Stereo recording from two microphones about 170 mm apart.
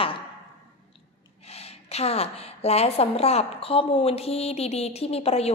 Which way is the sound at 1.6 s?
35° left (ahead or behind).